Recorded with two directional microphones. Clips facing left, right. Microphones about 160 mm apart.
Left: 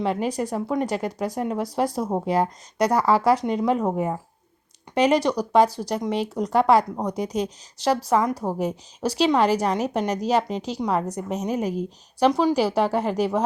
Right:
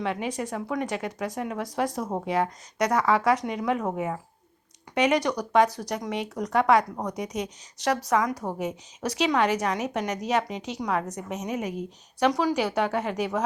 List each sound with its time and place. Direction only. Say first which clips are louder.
0.0 s a woman's voice: left 5 dB; 35° left (ahead or behind)